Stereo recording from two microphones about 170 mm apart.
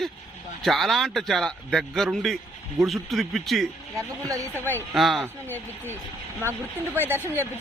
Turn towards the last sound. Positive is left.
turn(degrees=-10)  # may be behind; listen again after turning